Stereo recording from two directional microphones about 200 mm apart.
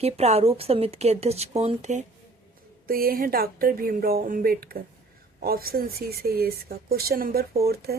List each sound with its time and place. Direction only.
0.0 s a woman's voice: 30° right (ahead or behind)
2.8 s speech: 50° right (ahead or behind)